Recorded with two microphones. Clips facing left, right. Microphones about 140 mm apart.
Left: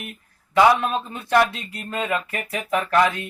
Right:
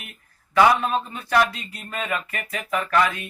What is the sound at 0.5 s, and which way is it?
Speech, 20° left (ahead or behind).